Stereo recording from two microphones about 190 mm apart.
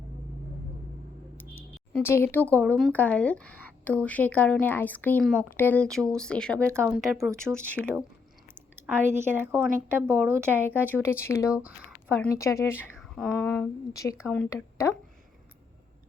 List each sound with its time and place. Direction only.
1.9 s speech: 10° left (ahead or behind)
6.7 s a woman's voice: 10° right (ahead or behind)
7.5 s speech: 5° left (ahead or behind)
9.0 s a woman's voice: 10° right (ahead or behind)
10.9 s speech: 10° left (ahead or behind)
13.0 s a sound: centre (ahead or behind)
13.5 s speech: 15° left (ahead or behind)
14.2 s speech: 5° left (ahead or behind)
14.5 s speech: 15° left (ahead or behind)